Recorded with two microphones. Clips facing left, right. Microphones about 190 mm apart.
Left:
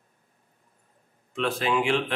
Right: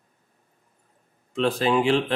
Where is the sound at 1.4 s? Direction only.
35° right (ahead or behind).